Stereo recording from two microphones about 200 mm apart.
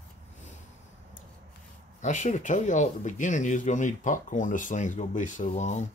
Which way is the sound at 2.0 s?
35° left (ahead or behind).